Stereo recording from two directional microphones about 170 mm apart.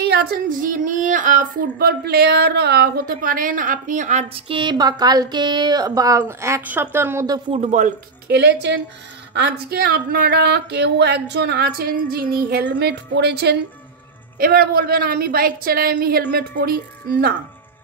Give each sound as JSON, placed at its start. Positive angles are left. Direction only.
{"t": 0.0, "sound": "female singing", "side_deg": -70}
{"t": 7.5, "sound": "female singing", "side_deg": -45}
{"t": 8.3, "sound": "speech", "side_deg": -80}
{"t": 14.4, "sound": "a woman's voice", "side_deg": -60}